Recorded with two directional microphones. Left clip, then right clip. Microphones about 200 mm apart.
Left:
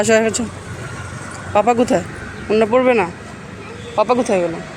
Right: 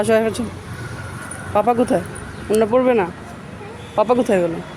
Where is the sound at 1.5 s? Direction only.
Centre (ahead or behind).